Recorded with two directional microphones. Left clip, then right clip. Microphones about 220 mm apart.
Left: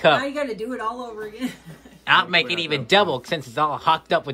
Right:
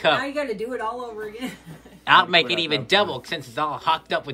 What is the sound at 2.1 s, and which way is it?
A man's voice, 5° right (ahead or behind).